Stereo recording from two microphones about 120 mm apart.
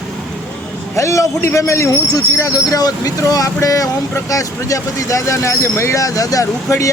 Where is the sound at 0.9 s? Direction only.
25° left (ahead or behind).